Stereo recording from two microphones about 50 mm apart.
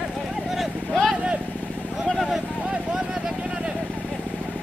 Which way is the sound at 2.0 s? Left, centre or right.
Centre.